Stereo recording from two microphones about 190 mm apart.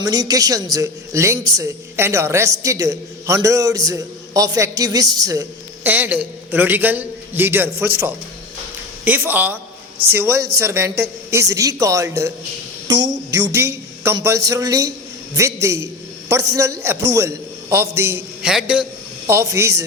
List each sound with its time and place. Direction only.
0.0 s a woman's voice: 20° right (ahead or behind)
9.0 s a woman's voice: 10° right (ahead or behind)
13.3 s a woman's voice: 15° right (ahead or behind)
19.3 s a woman's voice: 15° right (ahead or behind)